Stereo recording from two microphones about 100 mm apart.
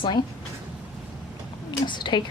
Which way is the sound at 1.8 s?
50° left (ahead or behind).